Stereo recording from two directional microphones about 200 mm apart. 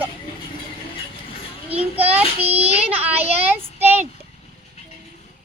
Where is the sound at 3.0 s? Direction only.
5° right (ahead or behind).